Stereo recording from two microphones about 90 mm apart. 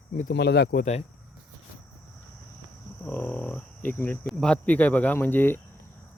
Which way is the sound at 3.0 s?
20° left (ahead or behind).